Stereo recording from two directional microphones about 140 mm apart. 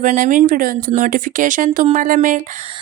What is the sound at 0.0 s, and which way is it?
Speech, 65° right (ahead or behind).